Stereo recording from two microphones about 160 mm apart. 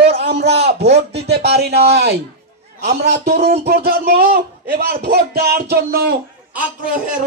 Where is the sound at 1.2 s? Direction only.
90° right.